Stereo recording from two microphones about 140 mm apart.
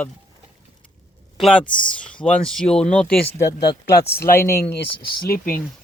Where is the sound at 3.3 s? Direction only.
30° left (ahead or behind).